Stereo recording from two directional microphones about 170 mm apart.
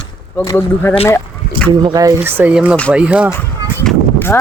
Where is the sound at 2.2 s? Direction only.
10° right (ahead or behind).